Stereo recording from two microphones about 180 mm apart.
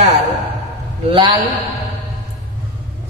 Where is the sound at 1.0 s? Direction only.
25° right (ahead or behind).